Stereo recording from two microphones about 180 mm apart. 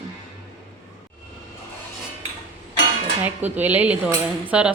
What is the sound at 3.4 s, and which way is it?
Speech, 10° right (ahead or behind).